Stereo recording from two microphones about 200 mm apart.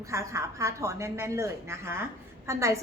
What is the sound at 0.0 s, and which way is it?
A woman's voice, 15° right (ahead or behind).